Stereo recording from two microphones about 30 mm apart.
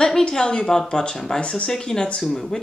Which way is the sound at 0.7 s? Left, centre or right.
Centre.